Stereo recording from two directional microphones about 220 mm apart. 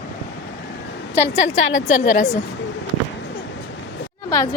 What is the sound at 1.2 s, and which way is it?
Speech, 60° left (ahead or behind).